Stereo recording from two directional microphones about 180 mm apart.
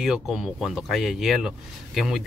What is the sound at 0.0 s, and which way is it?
Speech, centre (ahead or behind).